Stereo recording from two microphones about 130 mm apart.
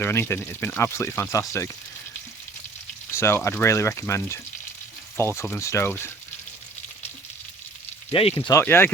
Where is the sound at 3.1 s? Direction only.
20° left (ahead or behind).